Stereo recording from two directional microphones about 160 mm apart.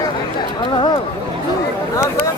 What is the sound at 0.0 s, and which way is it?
Chatter, 25° left (ahead or behind).